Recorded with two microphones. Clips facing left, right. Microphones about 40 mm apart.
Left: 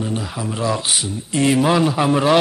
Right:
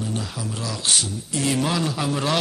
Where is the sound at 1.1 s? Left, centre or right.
Left.